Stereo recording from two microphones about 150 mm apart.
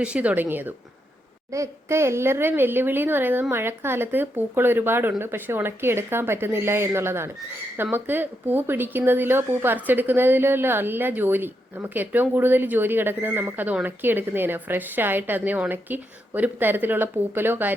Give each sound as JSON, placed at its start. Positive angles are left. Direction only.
{"t": 0.0, "sound": "speech", "side_deg": -10}